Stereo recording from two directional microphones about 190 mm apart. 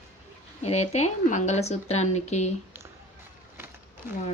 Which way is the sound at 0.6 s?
35° left (ahead or behind).